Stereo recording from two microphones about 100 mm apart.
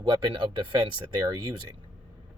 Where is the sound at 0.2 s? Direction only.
50° right (ahead or behind).